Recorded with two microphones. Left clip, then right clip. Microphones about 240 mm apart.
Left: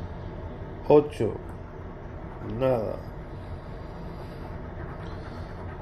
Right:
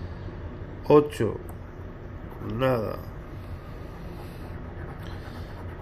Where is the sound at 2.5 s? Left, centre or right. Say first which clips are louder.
Even; centre.